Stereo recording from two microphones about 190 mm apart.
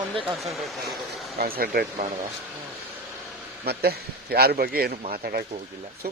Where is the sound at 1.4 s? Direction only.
50° right (ahead or behind).